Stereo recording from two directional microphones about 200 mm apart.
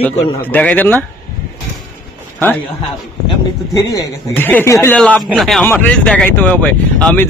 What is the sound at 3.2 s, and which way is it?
A man's voice, 15° left (ahead or behind).